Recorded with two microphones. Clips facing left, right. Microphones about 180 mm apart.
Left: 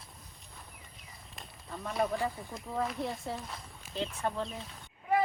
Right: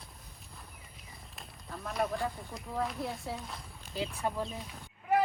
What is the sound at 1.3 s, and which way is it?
Snake, centre (ahead or behind).